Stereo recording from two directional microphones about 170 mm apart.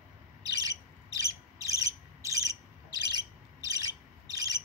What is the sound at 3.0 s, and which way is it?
Bird, 20° right (ahead or behind).